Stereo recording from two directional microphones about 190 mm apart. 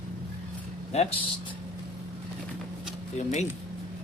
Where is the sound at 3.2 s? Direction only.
35° left (ahead or behind).